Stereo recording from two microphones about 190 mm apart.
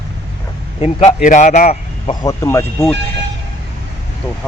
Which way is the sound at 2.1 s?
20° left (ahead or behind).